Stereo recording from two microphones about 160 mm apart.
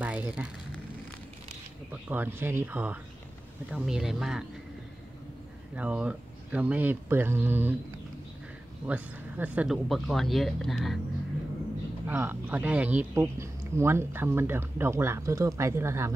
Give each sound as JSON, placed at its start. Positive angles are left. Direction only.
{"t": 0.0, "sound": "a sound", "side_deg": -10}
{"t": 2.0, "sound": "speech", "side_deg": -15}
{"t": 5.8, "sound": "speech", "side_deg": -5}
{"t": 8.8, "sound": "speech", "side_deg": -10}
{"t": 9.8, "sound": "speech", "side_deg": 0}
{"t": 12.1, "sound": "speech", "side_deg": -10}